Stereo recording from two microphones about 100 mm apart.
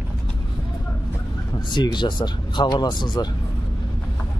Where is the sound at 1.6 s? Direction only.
50° left (ahead or behind).